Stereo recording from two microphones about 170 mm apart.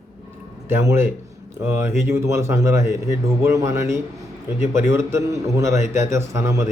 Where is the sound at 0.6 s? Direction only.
15° right (ahead or behind).